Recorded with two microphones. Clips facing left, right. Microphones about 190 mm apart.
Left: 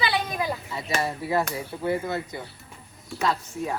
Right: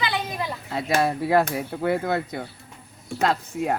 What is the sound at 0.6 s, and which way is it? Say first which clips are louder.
Speech: right 5 dB; 65° right (ahead or behind).